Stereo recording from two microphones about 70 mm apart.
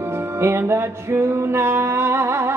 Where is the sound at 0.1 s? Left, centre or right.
Right.